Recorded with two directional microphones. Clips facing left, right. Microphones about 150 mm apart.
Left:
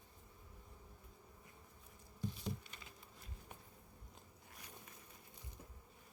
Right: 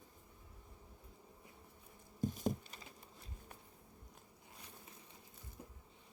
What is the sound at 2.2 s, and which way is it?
Insect, 45° right (ahead or behind).